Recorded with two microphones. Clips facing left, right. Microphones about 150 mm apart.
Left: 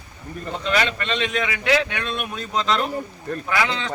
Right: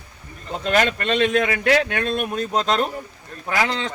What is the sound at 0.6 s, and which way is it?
A man's voice, 45° right (ahead or behind).